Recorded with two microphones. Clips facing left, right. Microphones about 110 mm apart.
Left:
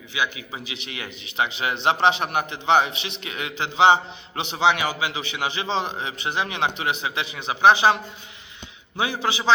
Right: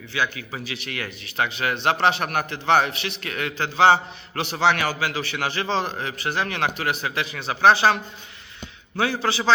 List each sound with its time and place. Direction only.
0.1 s a man's voice: 15° left (ahead or behind)
9.0 s a man's voice: 15° left (ahead or behind)